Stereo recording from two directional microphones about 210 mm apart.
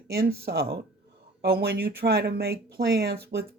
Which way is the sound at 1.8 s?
10° right (ahead or behind).